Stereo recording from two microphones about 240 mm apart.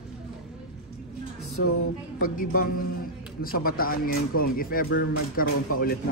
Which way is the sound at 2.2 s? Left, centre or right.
Left.